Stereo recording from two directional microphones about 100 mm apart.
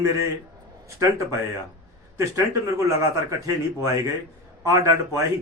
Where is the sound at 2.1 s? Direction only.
30° right (ahead or behind).